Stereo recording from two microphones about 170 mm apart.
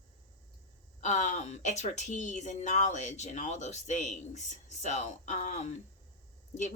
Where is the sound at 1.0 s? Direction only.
45° left (ahead or behind).